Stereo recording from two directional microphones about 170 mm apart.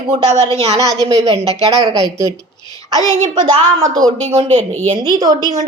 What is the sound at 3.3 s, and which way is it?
A woman's voice, 20° right (ahead or behind).